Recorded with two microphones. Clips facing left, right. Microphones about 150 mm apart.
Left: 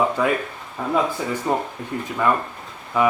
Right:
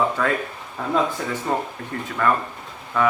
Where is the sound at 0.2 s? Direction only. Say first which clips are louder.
Left 2 dB; 15° left (ahead or behind).